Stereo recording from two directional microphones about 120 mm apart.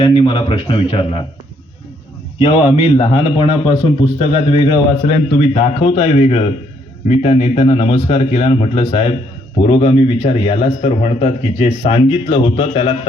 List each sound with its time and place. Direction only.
0.0 s a man's voice: 45° left (ahead or behind)
2.4 s a man's voice: 50° left (ahead or behind)